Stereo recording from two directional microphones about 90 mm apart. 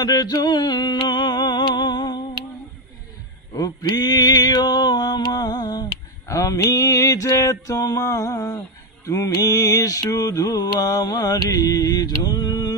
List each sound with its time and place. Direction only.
0.0 s a sound: 45° left (ahead or behind)
3.5 s male singing: 45° left (ahead or behind)
9.0 s mantra: 35° left (ahead or behind)